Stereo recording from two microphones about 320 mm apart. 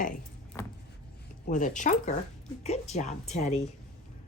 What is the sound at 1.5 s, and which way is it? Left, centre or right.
Speech, left.